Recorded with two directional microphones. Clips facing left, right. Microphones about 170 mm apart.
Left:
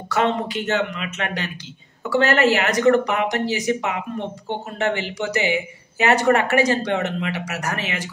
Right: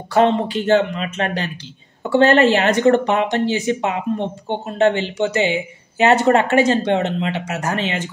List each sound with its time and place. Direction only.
0.1 s speech: 30° right (ahead or behind)